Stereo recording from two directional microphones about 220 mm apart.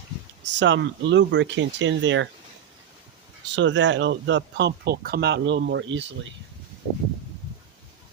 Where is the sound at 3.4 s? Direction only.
55° right (ahead or behind).